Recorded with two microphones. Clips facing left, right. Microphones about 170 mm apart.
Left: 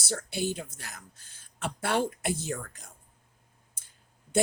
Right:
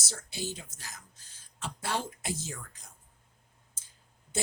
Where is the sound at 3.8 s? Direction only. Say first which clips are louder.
Even; 60° left (ahead or behind).